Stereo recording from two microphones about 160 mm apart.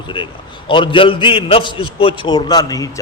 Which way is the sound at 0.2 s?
30° left (ahead or behind).